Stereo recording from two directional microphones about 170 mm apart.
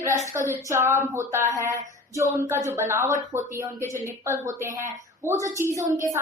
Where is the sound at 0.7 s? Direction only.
15° right (ahead or behind).